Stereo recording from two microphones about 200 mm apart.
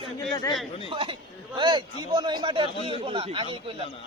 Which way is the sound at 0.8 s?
25° right (ahead or behind).